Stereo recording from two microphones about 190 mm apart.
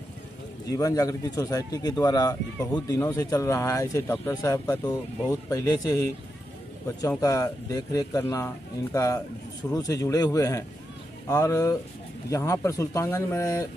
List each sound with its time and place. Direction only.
0.7 s speech: 20° left (ahead or behind)